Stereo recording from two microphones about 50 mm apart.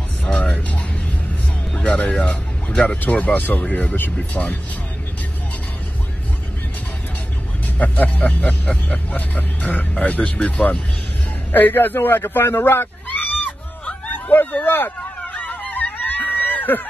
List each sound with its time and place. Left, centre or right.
0.2 s music: left
2.2 s speech: left
7.8 s speech: left
11.5 s speech: left
13.4 s a sound: left
15.0 s a sound: left